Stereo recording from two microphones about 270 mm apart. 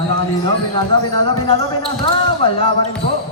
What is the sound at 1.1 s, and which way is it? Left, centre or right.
Speech, centre.